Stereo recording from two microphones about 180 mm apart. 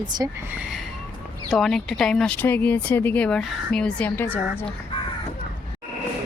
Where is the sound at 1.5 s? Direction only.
Centre (ahead or behind).